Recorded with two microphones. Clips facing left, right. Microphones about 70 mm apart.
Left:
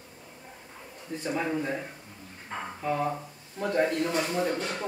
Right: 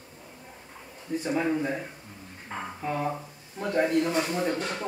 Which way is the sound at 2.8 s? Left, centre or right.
Centre.